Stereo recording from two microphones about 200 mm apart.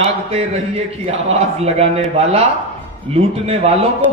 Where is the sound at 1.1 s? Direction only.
30° right (ahead or behind).